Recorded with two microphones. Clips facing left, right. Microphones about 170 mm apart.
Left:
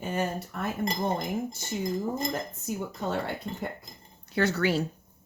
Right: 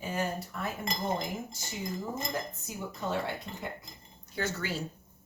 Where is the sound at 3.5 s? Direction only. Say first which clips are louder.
Left 7 dB; 35° left (ahead or behind).